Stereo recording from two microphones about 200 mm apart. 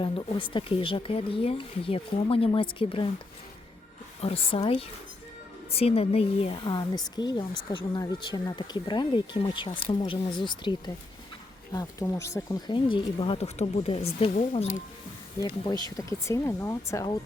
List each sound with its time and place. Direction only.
0.0 s speech: 25° left (ahead or behind)
4.2 s speech: 30° left (ahead or behind)
15.4 s speech: 20° left (ahead or behind)